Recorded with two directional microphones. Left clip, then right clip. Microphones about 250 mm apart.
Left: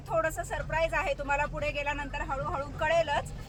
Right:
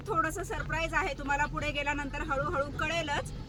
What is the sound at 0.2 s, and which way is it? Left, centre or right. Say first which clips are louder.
Speech: left 2 dB; centre.